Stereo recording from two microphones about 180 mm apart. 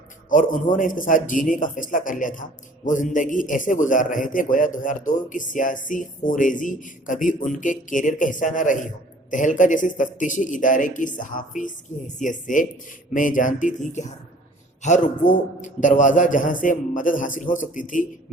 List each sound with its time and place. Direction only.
0.3 s a man's voice: 45° left (ahead or behind)